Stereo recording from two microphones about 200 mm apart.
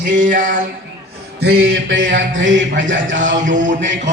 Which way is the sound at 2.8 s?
65° right (ahead or behind).